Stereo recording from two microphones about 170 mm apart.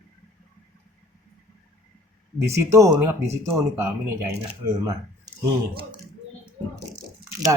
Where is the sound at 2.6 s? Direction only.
20° right (ahead or behind).